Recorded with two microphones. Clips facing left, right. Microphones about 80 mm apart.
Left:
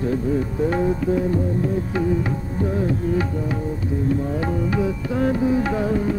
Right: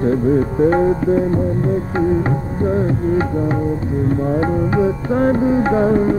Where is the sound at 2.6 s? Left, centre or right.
Right.